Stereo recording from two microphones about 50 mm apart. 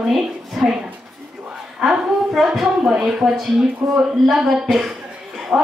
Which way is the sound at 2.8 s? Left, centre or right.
Centre.